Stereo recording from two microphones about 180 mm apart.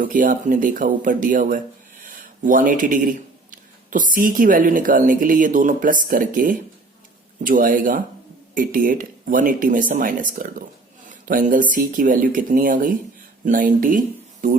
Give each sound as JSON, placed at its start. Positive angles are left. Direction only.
{"t": 0.0, "sound": "speech", "side_deg": -50}